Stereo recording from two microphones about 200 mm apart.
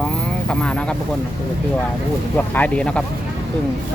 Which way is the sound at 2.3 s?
10° left (ahead or behind).